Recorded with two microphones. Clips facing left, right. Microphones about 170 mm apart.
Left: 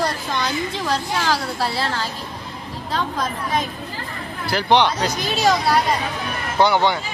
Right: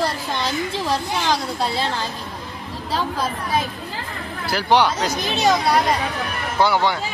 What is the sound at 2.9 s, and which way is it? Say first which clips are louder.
Speech: right 1 dB; 5° right (ahead or behind).